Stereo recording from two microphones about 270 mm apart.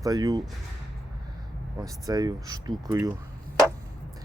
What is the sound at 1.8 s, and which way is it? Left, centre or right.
Speech, centre.